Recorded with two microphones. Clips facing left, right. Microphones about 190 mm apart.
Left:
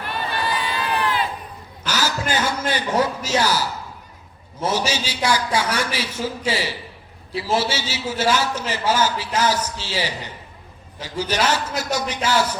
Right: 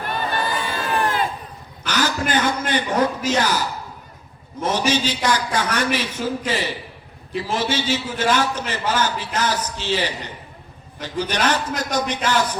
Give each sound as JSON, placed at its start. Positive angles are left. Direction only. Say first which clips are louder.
{"t": 0.3, "sound": "crowd", "louder": "left 2 dB", "side_deg": -45}
{"t": 1.9, "sound": "chuckle", "louder": "right 2 dB", "side_deg": 10}
{"t": 3.2, "sound": "a man's voice", "louder": "even", "side_deg": 10}
{"t": 11.0, "sound": "a man's voice", "louder": "even", "side_deg": 10}